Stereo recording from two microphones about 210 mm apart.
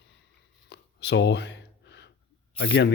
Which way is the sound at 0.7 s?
55° left (ahead or behind).